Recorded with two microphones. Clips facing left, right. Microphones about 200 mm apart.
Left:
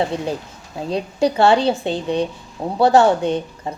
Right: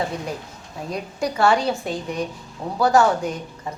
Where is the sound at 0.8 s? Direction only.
30° left (ahead or behind).